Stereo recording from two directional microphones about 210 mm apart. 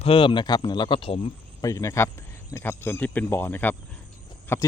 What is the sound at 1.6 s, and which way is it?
Speech, 15° left (ahead or behind).